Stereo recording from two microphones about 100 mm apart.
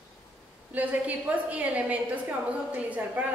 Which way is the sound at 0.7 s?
15° right (ahead or behind).